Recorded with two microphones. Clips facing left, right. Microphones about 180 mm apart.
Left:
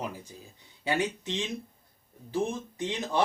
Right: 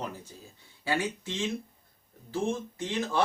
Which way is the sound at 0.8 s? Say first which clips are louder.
Left 1 dB; 20° left (ahead or behind).